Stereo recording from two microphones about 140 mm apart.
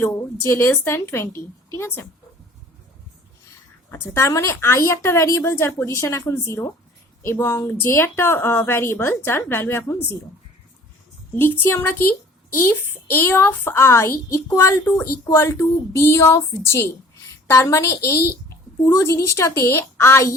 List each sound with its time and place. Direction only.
0.0 s speech: 20° left (ahead or behind)
3.9 s a woman's voice: 15° left (ahead or behind)
11.3 s a woman's voice: 15° left (ahead or behind)